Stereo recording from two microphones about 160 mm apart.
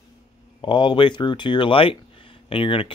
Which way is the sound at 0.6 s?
30° left (ahead or behind).